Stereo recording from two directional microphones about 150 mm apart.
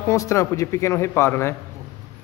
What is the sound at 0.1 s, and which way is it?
Speech, 20° left (ahead or behind).